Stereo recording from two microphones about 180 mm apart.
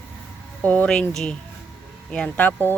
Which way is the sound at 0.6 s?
5° left (ahead or behind).